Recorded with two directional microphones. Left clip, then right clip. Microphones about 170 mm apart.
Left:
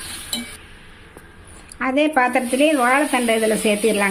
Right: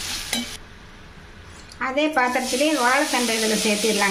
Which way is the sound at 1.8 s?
50° left (ahead or behind).